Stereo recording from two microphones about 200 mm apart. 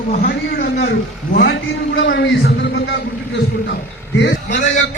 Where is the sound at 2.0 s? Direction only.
55° left (ahead or behind).